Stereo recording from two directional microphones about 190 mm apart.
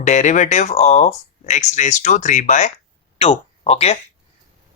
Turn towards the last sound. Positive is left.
turn(degrees=35)  # may be behind; listen again after turning